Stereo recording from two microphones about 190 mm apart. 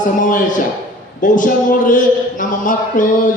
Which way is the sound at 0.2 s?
45° left (ahead or behind).